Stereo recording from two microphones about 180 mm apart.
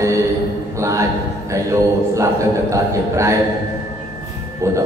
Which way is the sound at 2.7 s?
15° right (ahead or behind).